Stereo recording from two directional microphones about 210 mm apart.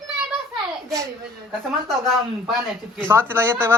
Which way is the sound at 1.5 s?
Centre (ahead or behind).